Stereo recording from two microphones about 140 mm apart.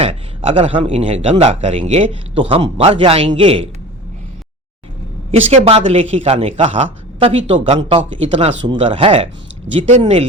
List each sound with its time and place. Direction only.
0.0 s a man's voice: 45° right (ahead or behind)
5.3 s a man's voice: 50° right (ahead or behind)